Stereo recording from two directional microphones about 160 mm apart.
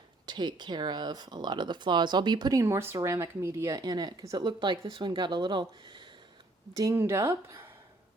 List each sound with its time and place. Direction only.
0.3 s speech: 30° right (ahead or behind)
6.7 s a woman's voice: 20° right (ahead or behind)